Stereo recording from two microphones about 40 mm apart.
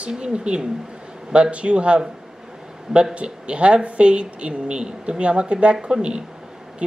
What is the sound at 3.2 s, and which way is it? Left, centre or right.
Speech, right.